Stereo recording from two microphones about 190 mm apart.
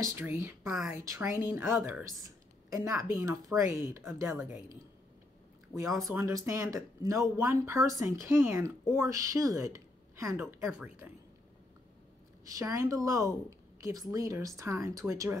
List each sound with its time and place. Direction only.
0.0 s speech: 15° right (ahead or behind)
5.8 s speech: 15° right (ahead or behind)
12.4 s speech: 15° right (ahead or behind)